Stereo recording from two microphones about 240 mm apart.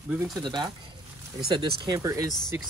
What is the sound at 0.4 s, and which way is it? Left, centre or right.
Speech, centre.